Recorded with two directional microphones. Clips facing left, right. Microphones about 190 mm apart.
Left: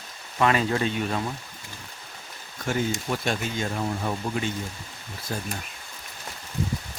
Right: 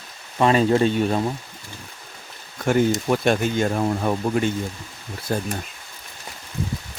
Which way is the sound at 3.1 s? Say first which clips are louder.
Right 8 dB; 60° right (ahead or behind).